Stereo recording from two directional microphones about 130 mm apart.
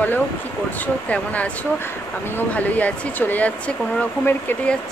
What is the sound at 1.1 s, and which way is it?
Speech, 10° left (ahead or behind).